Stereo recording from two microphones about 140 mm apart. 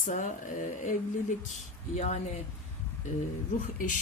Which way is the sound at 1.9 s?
50° left (ahead or behind).